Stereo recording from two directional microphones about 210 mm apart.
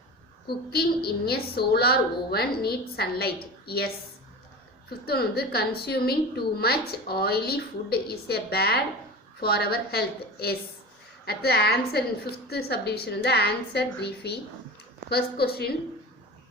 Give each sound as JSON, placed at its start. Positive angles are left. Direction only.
{"t": 0.4, "sound": "a woman's voice", "side_deg": 50}
{"t": 4.9, "sound": "a woman's voice", "side_deg": 50}